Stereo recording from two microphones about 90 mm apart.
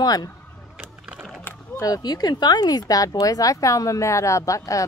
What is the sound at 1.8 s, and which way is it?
Speech, 45° left (ahead or behind).